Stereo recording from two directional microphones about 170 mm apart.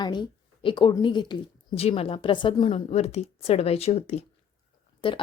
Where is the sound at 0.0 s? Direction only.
25° left (ahead or behind).